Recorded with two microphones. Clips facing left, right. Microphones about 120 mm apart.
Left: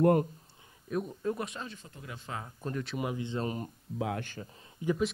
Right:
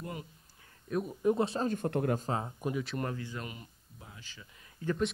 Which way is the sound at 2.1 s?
35° right (ahead or behind).